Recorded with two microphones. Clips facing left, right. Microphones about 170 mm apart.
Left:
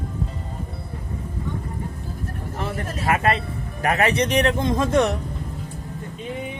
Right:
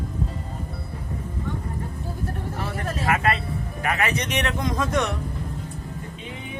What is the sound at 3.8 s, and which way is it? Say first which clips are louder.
Speech: left 6 dB; 40° left (ahead or behind).